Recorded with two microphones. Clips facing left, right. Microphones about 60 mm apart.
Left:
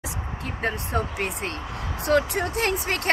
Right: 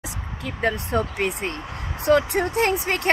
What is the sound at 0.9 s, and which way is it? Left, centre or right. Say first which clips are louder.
Speech: right 3 dB; right.